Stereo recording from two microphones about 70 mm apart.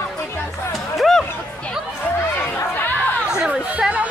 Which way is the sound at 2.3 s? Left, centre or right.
Left.